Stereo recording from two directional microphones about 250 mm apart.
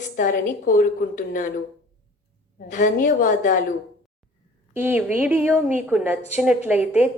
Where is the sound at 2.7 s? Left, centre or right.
Left.